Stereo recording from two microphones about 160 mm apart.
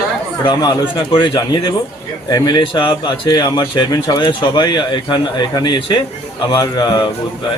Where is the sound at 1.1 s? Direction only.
30° left (ahead or behind).